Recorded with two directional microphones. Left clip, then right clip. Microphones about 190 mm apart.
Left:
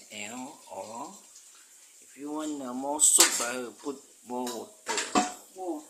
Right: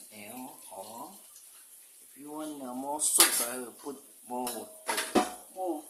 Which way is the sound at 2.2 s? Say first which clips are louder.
Left 5 dB; 20° left (ahead or behind).